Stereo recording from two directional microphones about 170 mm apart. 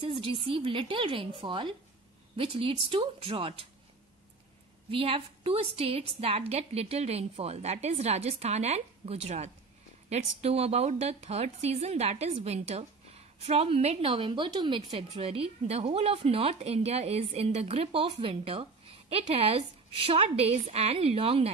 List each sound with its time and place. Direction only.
0.0 s a woman's voice: 30° right (ahead or behind)
4.9 s a woman's voice: 35° right (ahead or behind)